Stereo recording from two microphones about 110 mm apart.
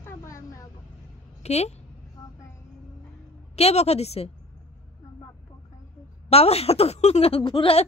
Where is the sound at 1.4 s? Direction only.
80° left.